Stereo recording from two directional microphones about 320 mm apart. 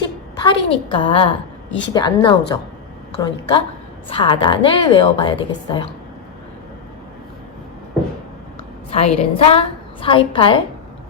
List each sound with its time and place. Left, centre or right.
0.3 s a woman's voice: centre
8.9 s a woman's voice: centre